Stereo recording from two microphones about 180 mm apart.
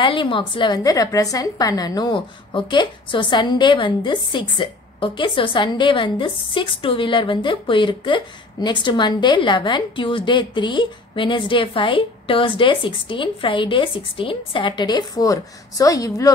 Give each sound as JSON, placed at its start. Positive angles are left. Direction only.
{"t": 0.0, "sound": "a woman's voice", "side_deg": 30}